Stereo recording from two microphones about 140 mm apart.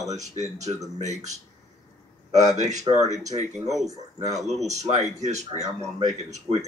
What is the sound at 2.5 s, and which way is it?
Speech, 55° right (ahead or behind).